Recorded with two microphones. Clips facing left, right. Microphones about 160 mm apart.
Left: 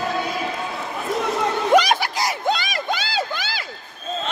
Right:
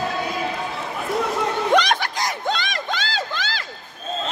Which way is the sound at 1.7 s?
10° left (ahead or behind).